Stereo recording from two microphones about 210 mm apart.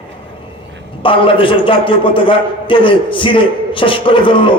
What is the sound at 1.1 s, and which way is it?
A man's voice, 25° left (ahead or behind).